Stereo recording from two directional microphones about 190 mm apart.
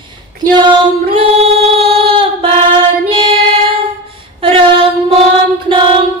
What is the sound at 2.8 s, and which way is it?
Child singing, 25° right (ahead or behind).